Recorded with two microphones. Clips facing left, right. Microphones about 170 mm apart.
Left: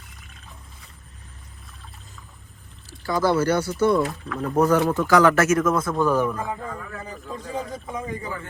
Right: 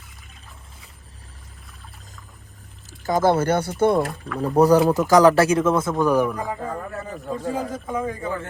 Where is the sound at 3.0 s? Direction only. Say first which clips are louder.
Right 2 dB; 50° right (ahead or behind).